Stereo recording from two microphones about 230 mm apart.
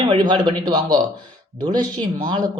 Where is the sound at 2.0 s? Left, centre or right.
Centre.